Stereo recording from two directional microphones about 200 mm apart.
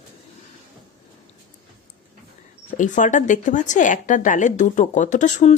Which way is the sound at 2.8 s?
40° left (ahead or behind).